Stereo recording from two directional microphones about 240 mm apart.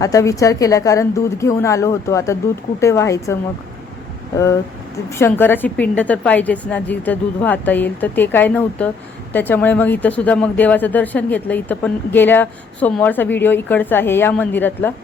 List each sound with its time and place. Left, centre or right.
0.0 s speech: centre
5.0 s speech: centre